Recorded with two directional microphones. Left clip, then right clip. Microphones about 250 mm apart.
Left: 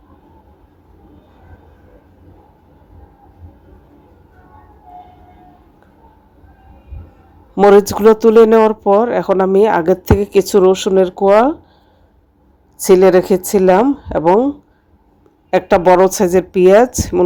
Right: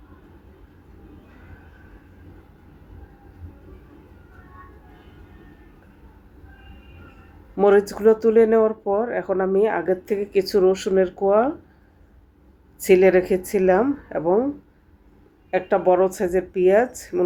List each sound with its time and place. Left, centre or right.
7.5 s speech: left
12.8 s a woman's voice: left